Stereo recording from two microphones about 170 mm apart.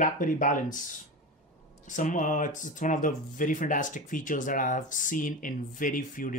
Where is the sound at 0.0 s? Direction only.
50° left (ahead or behind).